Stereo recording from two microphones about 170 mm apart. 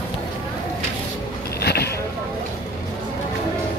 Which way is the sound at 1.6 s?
70° left (ahead or behind).